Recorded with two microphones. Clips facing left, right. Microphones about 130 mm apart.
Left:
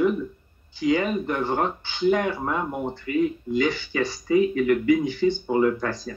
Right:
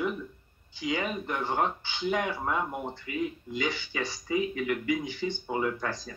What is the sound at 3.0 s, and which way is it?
Speech, 50° left (ahead or behind).